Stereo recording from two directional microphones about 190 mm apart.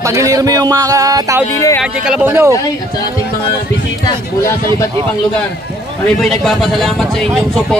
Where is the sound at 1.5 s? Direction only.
15° left (ahead or behind).